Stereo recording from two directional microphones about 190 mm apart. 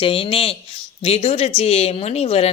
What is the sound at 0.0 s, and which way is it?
Speech, 30° left (ahead or behind).